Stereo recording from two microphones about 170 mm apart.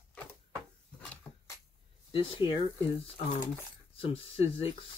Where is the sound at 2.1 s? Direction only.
30° left (ahead or behind).